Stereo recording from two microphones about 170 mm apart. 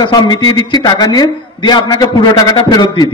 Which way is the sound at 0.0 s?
25° left (ahead or behind).